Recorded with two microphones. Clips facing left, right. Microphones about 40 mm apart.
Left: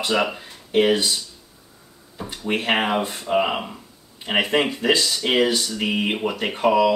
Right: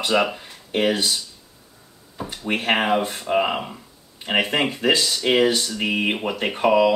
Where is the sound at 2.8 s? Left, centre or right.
Centre.